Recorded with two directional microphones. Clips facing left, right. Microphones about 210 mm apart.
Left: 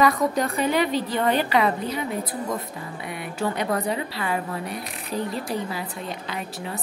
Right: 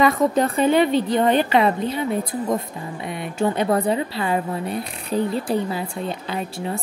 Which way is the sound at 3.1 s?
25° right (ahead or behind).